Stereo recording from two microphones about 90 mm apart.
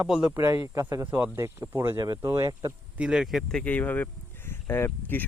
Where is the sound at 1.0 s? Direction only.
25° right (ahead or behind).